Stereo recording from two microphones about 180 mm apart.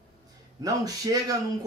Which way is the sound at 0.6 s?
20° right (ahead or behind).